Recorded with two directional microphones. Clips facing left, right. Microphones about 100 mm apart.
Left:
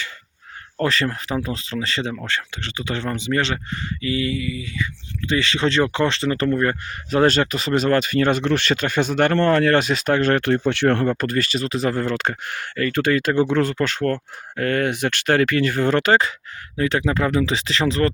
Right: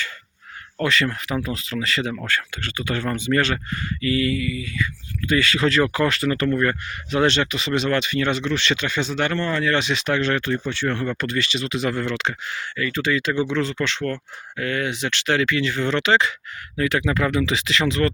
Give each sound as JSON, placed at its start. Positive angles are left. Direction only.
{"t": 0.8, "sound": "speech", "side_deg": 35}
{"t": 7.1, "sound": "speech", "side_deg": 40}
{"t": 11.0, "sound": "speech", "side_deg": 40}
{"t": 16.7, "sound": "speech", "side_deg": 30}